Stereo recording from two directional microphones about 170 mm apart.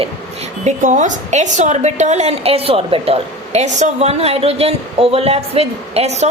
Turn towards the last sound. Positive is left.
turn(degrees=-40)  # may be behind; listen again after turning